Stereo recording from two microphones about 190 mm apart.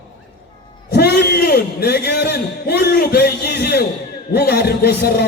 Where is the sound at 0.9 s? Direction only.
60° left (ahead or behind).